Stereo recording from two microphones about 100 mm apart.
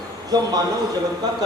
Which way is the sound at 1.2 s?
40° right (ahead or behind).